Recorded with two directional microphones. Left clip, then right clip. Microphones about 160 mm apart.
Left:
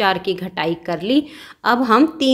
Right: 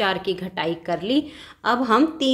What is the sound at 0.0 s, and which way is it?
A woman's voice, 25° left (ahead or behind).